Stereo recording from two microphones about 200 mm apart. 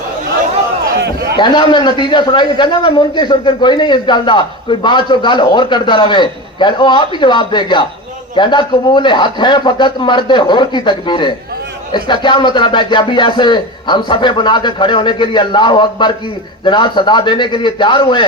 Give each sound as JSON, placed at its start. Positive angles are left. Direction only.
{"t": 1.4, "sound": "a man's voice", "side_deg": 20}